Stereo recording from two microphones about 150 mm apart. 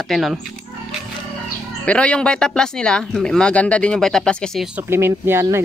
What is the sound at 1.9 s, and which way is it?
Speech, 5° left (ahead or behind).